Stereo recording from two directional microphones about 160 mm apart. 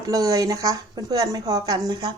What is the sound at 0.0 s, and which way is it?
A woman's voice, 20° right (ahead or behind).